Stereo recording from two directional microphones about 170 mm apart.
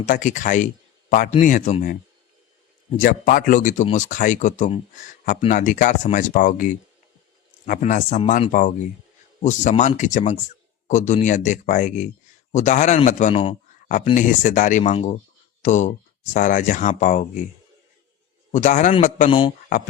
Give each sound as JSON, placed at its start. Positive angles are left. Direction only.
{"t": 0.0, "sound": "speech", "side_deg": 50}
{"t": 3.0, "sound": "a man's voice", "side_deg": 55}
{"t": 13.8, "sound": "speech", "side_deg": 50}
{"t": 18.5, "sound": "speech", "side_deg": 45}
{"t": 19.3, "sound": "speech", "side_deg": 30}